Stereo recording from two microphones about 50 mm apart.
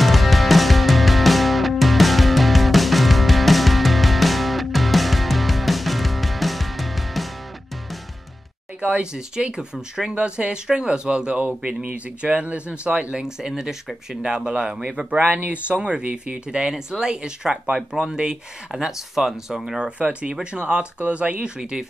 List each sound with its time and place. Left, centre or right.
0.0 s music: centre
8.8 s speech: centre
15.1 s speech: right; by 19.9 s centre
20.0 s speech: right
21.5 s speech: centre